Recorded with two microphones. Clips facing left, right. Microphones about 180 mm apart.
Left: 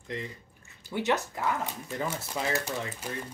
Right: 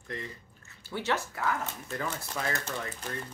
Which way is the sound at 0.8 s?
15° left (ahead or behind).